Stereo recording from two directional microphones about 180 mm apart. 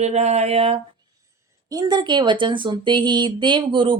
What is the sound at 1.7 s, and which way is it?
Speech, 20° right (ahead or behind).